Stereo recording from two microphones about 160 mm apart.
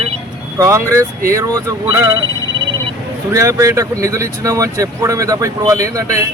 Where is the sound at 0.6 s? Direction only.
15° right (ahead or behind).